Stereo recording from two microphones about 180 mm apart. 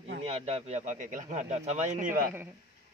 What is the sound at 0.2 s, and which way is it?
Speech, 35° right (ahead or behind).